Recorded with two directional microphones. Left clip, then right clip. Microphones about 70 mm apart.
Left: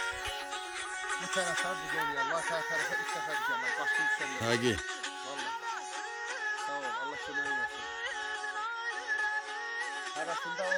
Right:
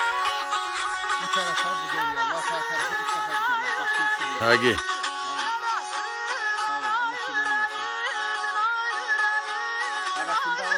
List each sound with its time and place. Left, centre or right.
1.3 s music: left
3.3 s music: left
4.4 s speech: centre
6.9 s music: left